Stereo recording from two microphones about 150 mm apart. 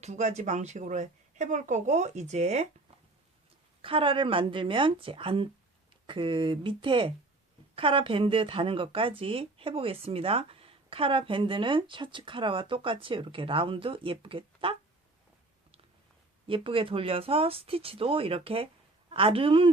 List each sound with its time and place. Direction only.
0.0 s speech: 50° right (ahead or behind)
3.8 s speech: 35° right (ahead or behind)
16.5 s speech: 35° right (ahead or behind)